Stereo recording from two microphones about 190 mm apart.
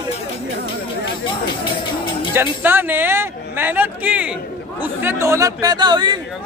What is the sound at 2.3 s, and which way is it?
A man's voice, 10° right (ahead or behind).